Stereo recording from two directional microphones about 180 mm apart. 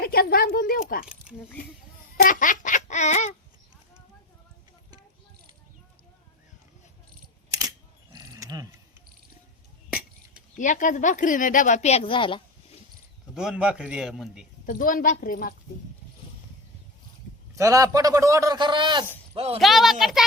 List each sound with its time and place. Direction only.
0.0 s speech: 60° left (ahead or behind)
1.0 s speech: 5° right (ahead or behind)
2.1 s a woman's voice: 50° left (ahead or behind)
8.1 s cricket: 20° right (ahead or behind)
10.6 s a woman's voice: 45° left (ahead or behind); by 12.4 s 30° left (ahead or behind)
13.3 s a man's voice: 5° right (ahead or behind)
14.7 s a woman's voice: 50° left (ahead or behind)
17.5 s a man's voice: 15° right (ahead or behind); by 19.5 s 35° right (ahead or behind)
19.5 s a man's voice: centre (ahead or behind)